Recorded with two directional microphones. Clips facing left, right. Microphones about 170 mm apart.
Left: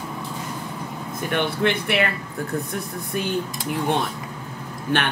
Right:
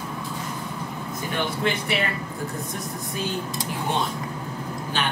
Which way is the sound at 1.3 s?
60° left (ahead or behind).